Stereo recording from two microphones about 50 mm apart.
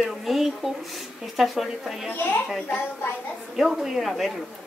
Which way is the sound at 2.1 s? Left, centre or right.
Left.